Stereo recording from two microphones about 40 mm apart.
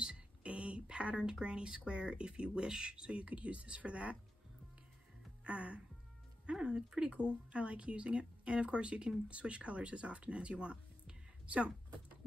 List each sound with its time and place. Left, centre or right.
0.0 s a sound: right
1.4 s speech: right
5.4 s speech: right
6.5 s speech: right